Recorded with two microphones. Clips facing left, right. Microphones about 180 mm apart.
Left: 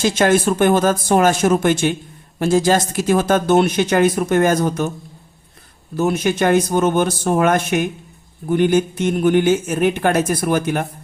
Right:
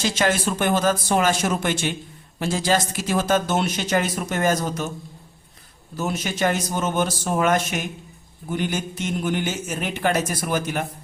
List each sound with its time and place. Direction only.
0.0 s speech: 50° left (ahead or behind)
6.0 s speech: 55° left (ahead or behind)